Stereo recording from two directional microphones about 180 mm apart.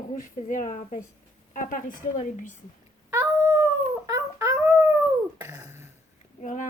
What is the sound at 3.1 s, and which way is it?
Dog, 15° right (ahead or behind).